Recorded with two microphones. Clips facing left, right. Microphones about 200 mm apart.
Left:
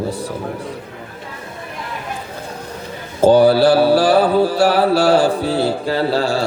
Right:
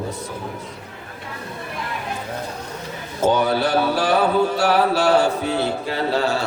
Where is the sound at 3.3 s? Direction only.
35° left (ahead or behind).